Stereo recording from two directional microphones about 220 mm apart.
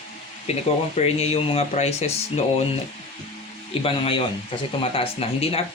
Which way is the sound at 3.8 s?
25° left (ahead or behind).